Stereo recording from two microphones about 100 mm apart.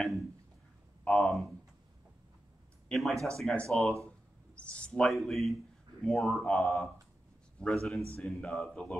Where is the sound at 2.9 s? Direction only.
Centre (ahead or behind).